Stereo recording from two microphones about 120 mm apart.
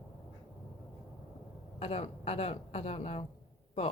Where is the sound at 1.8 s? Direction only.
55° left (ahead or behind).